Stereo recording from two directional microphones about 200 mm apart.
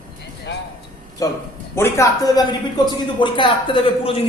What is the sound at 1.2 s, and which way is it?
A man's voice, 15° left (ahead or behind).